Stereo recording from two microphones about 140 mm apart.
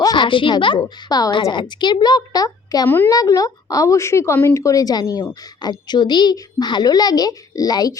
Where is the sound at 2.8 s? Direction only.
15° left (ahead or behind).